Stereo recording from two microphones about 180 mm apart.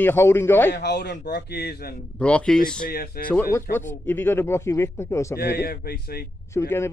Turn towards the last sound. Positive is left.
turn(degrees=15)  # may be behind; listen again after turning